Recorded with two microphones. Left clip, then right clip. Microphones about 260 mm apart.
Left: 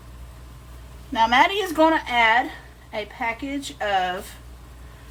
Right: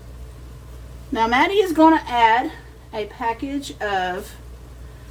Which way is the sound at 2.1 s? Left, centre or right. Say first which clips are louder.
Right 2 dB; left.